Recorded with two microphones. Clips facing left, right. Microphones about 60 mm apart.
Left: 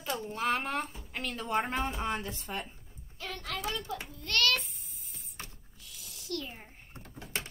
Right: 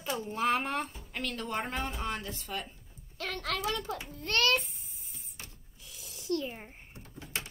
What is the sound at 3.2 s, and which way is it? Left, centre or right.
Speech, right.